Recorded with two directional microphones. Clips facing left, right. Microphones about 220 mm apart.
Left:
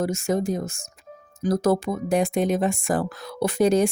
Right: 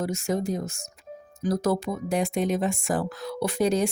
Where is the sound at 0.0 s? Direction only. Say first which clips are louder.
Left 3 dB; 45° left (ahead or behind).